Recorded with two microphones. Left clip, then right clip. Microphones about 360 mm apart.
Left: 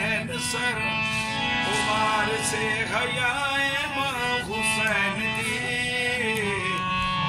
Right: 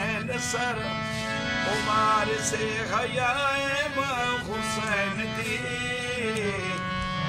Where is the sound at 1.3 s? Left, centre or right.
Centre.